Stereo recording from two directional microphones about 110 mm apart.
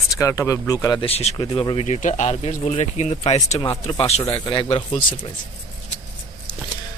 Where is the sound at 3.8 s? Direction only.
70° left (ahead or behind); by 4.7 s 50° left (ahead or behind).